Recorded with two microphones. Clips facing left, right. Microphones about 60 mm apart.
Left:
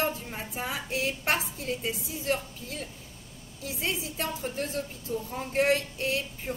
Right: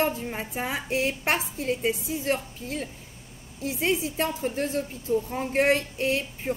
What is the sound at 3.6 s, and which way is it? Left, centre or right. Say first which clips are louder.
Speech: right 7 dB; right.